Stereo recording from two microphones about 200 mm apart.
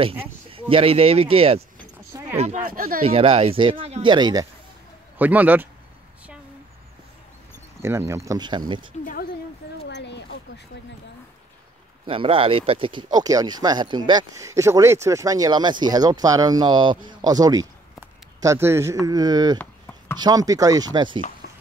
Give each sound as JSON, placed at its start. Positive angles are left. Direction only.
{"t": 0.2, "sound": "speech", "side_deg": -25}
{"t": 2.1, "sound": "a sound", "side_deg": -15}
{"t": 2.6, "sound": "speech", "side_deg": -45}
{"t": 3.0, "sound": "speech", "side_deg": -30}
{"t": 5.2, "sound": "speech", "side_deg": -10}
{"t": 7.8, "sound": "speech", "side_deg": -15}
{"t": 9.8, "sound": "a sound", "side_deg": 60}
{"t": 12.1, "sound": "speech", "side_deg": -25}
{"t": 19.6, "sound": "chopping", "side_deg": 10}
{"t": 20.2, "sound": "speech", "side_deg": -20}
{"t": 21.4, "sound": "a sound", "side_deg": 55}